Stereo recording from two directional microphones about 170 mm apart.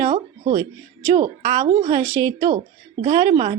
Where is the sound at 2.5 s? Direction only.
45° right (ahead or behind).